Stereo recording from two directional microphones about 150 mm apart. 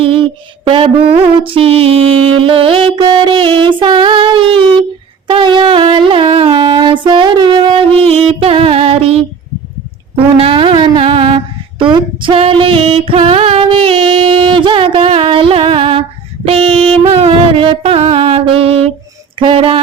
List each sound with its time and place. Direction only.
0.0 s a sound: 35° right (ahead or behind)
5.3 s music: 30° right (ahead or behind)
10.2 s brass instrument: 40° right (ahead or behind)
11.8 s female singing: 30° right (ahead or behind)
17.0 s music: 40° right (ahead or behind)
19.4 s a sound: 35° right (ahead or behind)